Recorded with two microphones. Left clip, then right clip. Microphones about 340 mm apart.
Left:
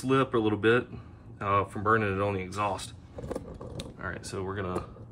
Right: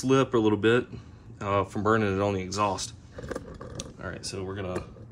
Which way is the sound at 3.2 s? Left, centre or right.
Centre.